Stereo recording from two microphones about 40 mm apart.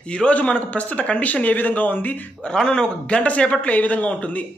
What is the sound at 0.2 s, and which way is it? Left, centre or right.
A man's voice, left.